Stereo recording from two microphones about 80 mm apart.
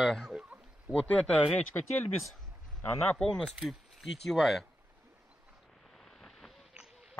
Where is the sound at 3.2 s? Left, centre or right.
Centre.